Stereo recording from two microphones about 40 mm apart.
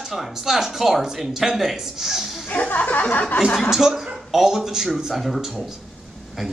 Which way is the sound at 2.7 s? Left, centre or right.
Left.